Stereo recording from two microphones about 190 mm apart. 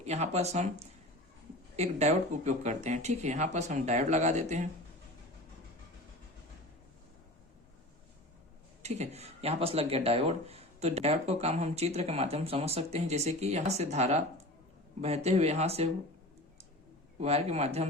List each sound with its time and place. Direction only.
0.0 s speech: 35° right (ahead or behind)
8.8 s speech: 35° right (ahead or behind)
17.2 s speech: 35° right (ahead or behind)